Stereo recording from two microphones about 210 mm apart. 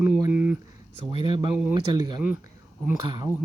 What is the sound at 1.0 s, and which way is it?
Speech, 25° right (ahead or behind).